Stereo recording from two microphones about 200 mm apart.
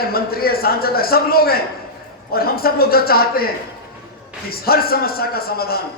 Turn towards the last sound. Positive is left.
turn(degrees=50)  # may be behind; listen again after turning